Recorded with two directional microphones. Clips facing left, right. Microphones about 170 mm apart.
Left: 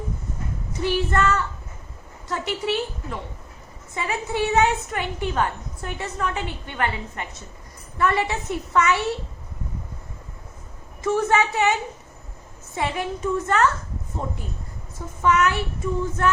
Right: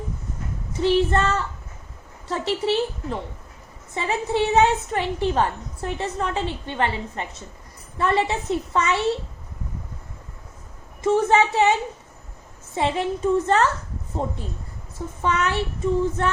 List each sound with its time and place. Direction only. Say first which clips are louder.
0.8 s a woman's voice: right 3 dB; 25° right (ahead or behind)
11.0 s a woman's voice: right 3 dB; 25° right (ahead or behind)
12.7 s a woman's voice: right 3 dB; 25° right (ahead or behind)